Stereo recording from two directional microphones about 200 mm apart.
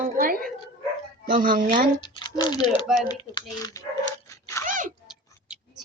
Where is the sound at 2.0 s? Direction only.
20° left (ahead or behind).